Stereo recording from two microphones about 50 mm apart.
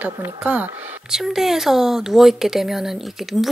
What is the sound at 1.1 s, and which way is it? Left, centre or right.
Speech, centre.